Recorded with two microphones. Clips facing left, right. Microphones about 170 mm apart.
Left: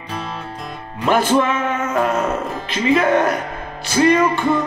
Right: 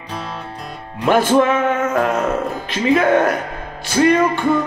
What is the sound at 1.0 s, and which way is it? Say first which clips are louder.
Music: right 2 dB; 50° right (ahead or behind).